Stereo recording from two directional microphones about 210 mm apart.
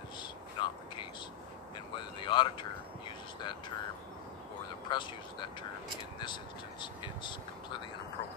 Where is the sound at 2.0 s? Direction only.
20° left (ahead or behind).